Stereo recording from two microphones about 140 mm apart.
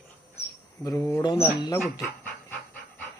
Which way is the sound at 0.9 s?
20° left (ahead or behind).